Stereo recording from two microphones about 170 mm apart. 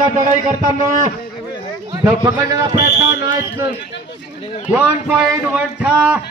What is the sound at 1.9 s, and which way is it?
A man's voice, 20° right (ahead or behind).